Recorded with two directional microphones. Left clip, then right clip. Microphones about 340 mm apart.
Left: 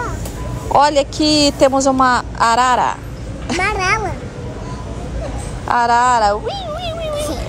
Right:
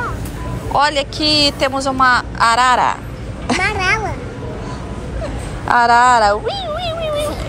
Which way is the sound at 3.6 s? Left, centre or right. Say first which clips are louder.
Left 1 dB; left.